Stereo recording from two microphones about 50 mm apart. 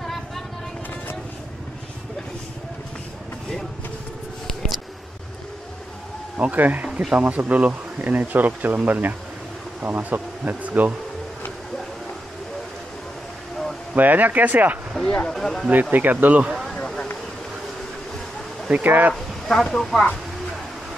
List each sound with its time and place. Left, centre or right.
6.3 s speech: right
6.9 s speech: centre
7.2 s speech: right
13.9 s speech: right
15.0 s speech: centre
15.7 s speech: right
16.7 s a sound: centre
18.7 s speech: right
19.1 s speech: centre